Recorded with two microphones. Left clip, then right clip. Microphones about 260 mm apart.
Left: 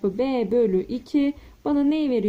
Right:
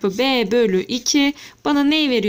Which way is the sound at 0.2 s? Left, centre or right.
Right.